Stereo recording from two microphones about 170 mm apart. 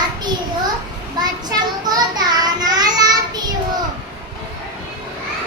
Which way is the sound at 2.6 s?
25° right (ahead or behind).